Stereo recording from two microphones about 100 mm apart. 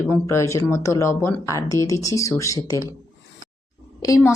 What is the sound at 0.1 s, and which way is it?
Speech, 30° left (ahead or behind).